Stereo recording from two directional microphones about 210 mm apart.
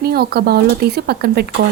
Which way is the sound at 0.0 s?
50° right (ahead or behind).